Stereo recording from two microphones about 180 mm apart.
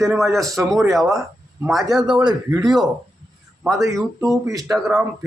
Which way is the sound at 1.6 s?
Centre (ahead or behind).